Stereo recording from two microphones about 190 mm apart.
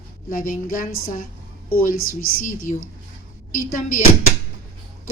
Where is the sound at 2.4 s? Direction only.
45° left (ahead or behind).